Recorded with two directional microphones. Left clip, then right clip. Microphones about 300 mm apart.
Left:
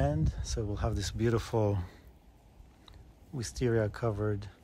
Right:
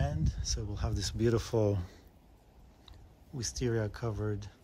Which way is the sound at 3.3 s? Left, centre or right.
Centre.